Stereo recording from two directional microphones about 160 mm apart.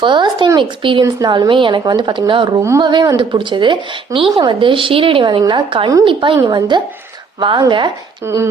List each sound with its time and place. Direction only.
0.0 s a sound: 30° right (ahead or behind)
1.0 s a woman's voice: 25° right (ahead or behind)
8.3 s speech: 15° right (ahead or behind)